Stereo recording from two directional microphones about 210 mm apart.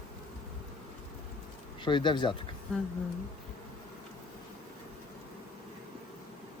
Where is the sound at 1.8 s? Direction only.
20° left (ahead or behind).